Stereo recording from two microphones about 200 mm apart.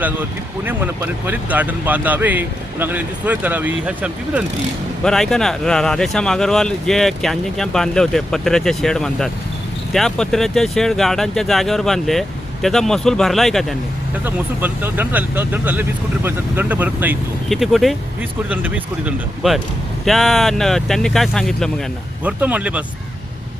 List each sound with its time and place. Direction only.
0.0 s speech: 10° right (ahead or behind)
14.3 s speech: 10° right (ahead or behind)